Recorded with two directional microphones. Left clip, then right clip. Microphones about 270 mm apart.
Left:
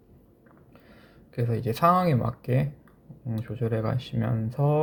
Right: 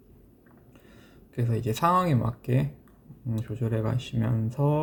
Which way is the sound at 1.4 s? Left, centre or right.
Centre.